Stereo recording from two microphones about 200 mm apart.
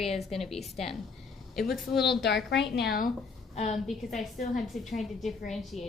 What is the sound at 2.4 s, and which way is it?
Speech, 60° left (ahead or behind).